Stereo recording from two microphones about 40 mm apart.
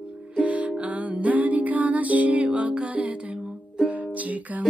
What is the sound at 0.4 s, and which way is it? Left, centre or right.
Music, right.